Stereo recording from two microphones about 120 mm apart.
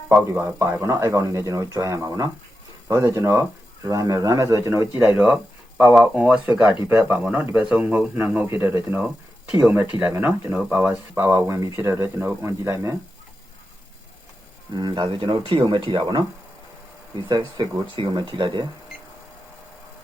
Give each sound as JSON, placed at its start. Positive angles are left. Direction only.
{"t": 0.3, "sound": "speech", "side_deg": -20}
{"t": 11.2, "sound": "speech", "side_deg": -25}
{"t": 14.8, "sound": "speech", "side_deg": -40}
{"t": 17.2, "sound": "speech", "side_deg": -40}